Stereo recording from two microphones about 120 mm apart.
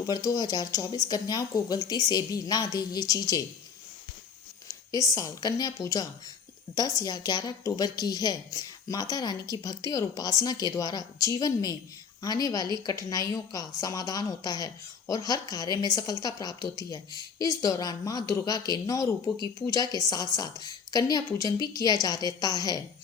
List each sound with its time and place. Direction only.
0.0 s a woman's voice: 30° left (ahead or behind)
4.9 s a woman's voice: 30° left (ahead or behind)